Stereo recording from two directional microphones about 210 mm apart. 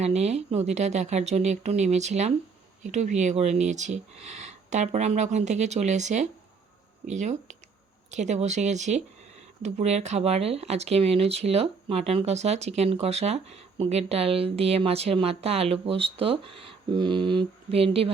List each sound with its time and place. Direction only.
0.0 s speech: 30° right (ahead or behind)